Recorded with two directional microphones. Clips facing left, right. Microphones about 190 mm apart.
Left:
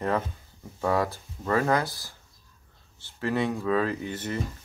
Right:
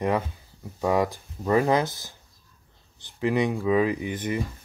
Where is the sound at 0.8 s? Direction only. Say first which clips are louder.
Right 2 dB; 15° right (ahead or behind).